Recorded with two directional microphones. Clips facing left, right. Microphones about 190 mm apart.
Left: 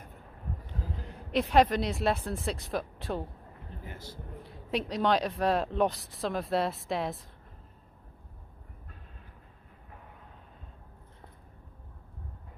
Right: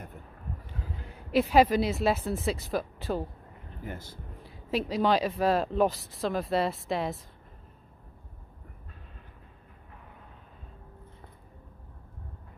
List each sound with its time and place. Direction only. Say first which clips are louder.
1.3 s speech: right 2 dB; 5° right (ahead or behind)
3.8 s speech: right 6 dB; 50° right (ahead or behind)
4.4 s speech: right 2 dB; centre (ahead or behind)